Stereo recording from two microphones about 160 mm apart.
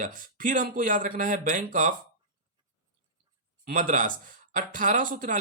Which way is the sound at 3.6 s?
60° right (ahead or behind).